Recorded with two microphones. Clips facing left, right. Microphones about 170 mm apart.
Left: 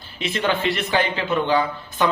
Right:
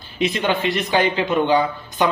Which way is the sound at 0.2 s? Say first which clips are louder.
Right 2 dB; 15° right (ahead or behind).